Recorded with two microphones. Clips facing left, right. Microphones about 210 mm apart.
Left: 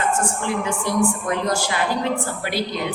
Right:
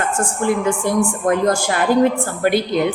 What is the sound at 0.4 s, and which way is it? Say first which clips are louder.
A woman's voice: right 6 dB; 50° right (ahead or behind).